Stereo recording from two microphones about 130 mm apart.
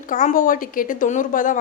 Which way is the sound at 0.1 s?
85° left.